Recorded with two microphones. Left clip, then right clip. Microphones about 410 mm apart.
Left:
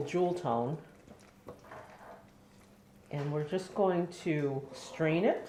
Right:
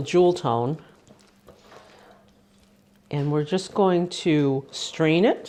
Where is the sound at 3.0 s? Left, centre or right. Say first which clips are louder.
Right 10 dB; right.